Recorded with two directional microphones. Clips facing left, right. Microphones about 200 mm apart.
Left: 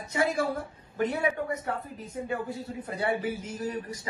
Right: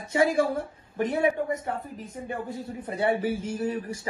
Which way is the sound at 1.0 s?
20° right (ahead or behind).